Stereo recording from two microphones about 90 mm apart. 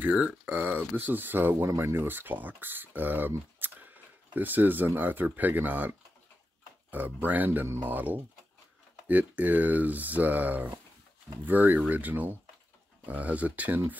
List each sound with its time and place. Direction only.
0.0 s speech: 15° right (ahead or behind)